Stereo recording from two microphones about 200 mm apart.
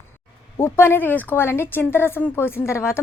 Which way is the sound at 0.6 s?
10° left (ahead or behind).